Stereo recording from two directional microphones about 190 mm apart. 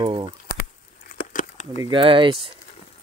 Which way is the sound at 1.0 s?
45° left (ahead or behind).